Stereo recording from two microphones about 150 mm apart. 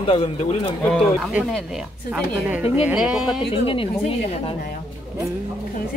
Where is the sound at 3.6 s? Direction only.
35° left (ahead or behind).